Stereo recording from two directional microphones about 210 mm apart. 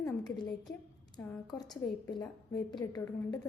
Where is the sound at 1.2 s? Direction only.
20° left (ahead or behind).